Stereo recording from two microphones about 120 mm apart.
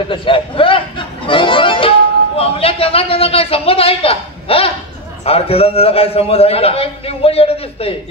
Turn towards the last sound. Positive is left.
turn(degrees=55)  # may be behind; listen again after turning